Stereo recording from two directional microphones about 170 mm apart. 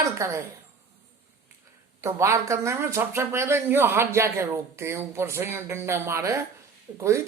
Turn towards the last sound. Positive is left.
turn(degrees=-15)  # may be behind; listen again after turning